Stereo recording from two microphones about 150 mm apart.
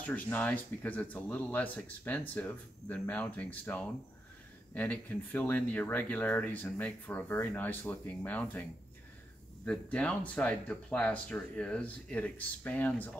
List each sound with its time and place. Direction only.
0.0 s speech: 10° left (ahead or behind)
9.7 s speech: 5° left (ahead or behind)